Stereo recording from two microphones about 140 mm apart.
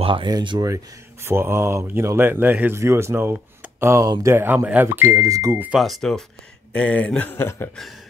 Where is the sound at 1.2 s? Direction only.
15° right (ahead or behind).